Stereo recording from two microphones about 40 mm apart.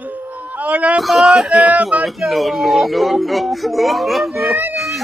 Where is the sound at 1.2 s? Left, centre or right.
Centre.